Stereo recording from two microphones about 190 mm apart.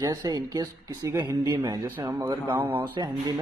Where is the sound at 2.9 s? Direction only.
20° right (ahead or behind).